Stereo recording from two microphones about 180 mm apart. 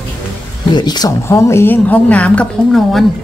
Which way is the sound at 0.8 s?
20° left (ahead or behind).